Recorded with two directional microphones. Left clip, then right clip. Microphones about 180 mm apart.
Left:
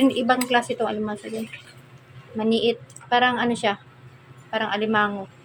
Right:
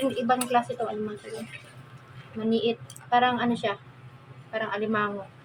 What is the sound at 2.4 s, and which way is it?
A woman's voice, 45° left (ahead or behind).